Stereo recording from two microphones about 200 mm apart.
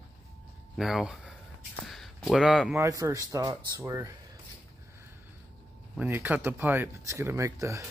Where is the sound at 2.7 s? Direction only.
15° right (ahead or behind).